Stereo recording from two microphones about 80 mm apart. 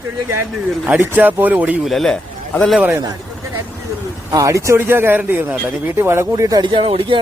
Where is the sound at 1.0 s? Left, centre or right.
Right.